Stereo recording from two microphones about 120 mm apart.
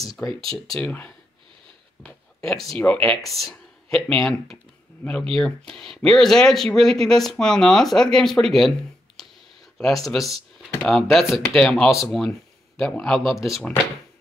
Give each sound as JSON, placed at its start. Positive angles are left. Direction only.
{"t": 0.5, "sound": "speech", "side_deg": 5}
{"t": 3.5, "sound": "a sound", "side_deg": 10}
{"t": 5.0, "sound": "speech", "side_deg": 15}
{"t": 5.4, "sound": "speech", "side_deg": 5}
{"t": 12.8, "sound": "speech", "side_deg": 10}